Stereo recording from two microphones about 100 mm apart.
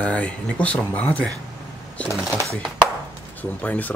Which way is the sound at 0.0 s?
15° left (ahead or behind).